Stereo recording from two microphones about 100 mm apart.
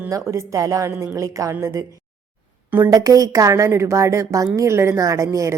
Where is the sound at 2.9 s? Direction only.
35° right (ahead or behind).